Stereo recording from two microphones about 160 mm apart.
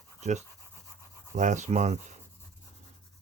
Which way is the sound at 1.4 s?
50° right (ahead or behind).